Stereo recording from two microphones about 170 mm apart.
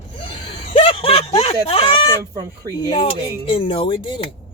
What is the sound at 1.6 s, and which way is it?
Speech, 30° left (ahead or behind).